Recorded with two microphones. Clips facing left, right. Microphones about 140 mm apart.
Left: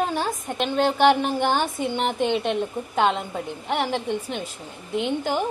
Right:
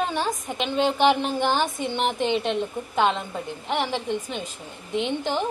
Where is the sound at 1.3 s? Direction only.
15° left (ahead or behind).